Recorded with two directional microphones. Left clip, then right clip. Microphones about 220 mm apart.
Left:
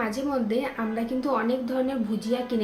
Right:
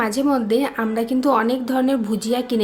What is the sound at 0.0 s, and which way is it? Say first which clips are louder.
A woman's voice: right 8 dB; 55° right (ahead or behind).